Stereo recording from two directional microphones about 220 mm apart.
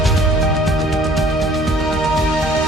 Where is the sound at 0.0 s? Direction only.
Centre (ahead or behind).